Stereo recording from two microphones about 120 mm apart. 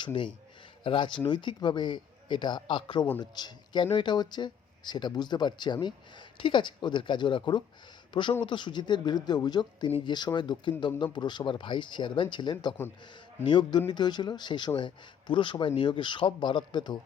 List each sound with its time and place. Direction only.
0.0 s speech: 45° left (ahead or behind)